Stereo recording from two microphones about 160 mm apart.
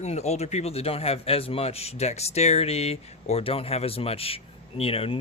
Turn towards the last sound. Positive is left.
turn(degrees=35)  # may be behind; listen again after turning